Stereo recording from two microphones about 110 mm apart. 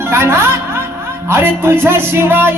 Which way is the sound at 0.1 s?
25° right (ahead or behind).